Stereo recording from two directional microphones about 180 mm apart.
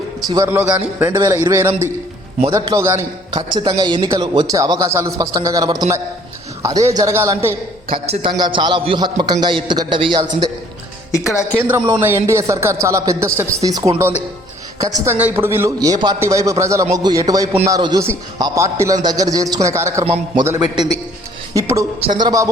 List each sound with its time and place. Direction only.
0.3 s a man's voice: 15° right (ahead or behind)
8.0 s a man's voice: 30° right (ahead or behind)
11.1 s speech: 15° left (ahead or behind)
11.5 s a man's voice: 10° right (ahead or behind)
21.5 s a man's voice: 15° right (ahead or behind)